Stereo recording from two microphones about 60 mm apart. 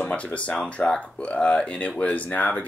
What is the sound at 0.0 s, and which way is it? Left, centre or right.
Speech, left.